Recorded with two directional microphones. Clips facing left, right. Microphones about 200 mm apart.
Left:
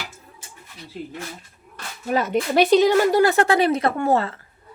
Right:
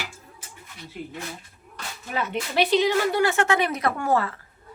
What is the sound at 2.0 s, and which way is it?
A woman's voice, 40° left (ahead or behind).